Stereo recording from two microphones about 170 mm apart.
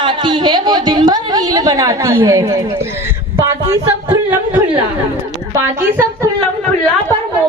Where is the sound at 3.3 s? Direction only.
15° right (ahead or behind).